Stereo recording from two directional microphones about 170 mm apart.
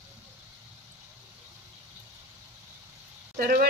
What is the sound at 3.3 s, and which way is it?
Speech, 60° right (ahead or behind).